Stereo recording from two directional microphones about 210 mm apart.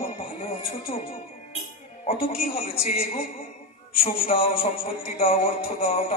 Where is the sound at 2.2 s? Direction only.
30° left (ahead or behind).